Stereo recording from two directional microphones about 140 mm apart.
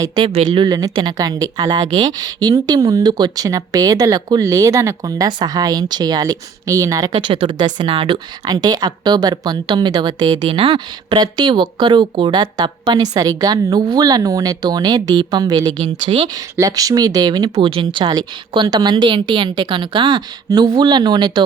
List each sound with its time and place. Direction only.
0.3 s speech: 35° right (ahead or behind)